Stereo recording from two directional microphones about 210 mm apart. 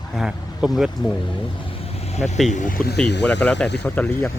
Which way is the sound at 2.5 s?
45° left (ahead or behind).